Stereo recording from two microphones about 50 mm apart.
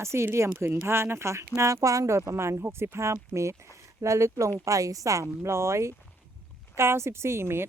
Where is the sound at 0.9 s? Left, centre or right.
Right.